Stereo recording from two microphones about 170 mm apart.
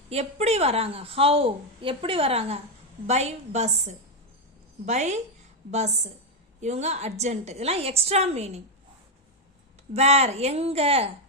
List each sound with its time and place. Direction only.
0.1 s a woman's voice: 40° right (ahead or behind)
6.6 s a woman's voice: 40° right (ahead or behind)
9.9 s a woman's voice: 40° right (ahead or behind)